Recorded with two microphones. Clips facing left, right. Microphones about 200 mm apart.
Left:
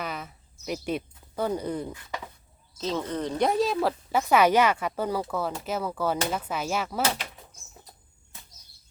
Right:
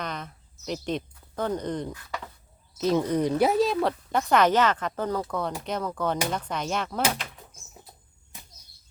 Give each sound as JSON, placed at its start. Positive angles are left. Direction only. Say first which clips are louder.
{"t": 0.0, "sound": "a sound", "louder": "even", "side_deg": 5}
{"t": 1.9, "sound": "speech", "louder": "even", "side_deg": 20}
{"t": 2.7, "sound": "a woman's voice", "louder": "right 6 dB", "side_deg": -15}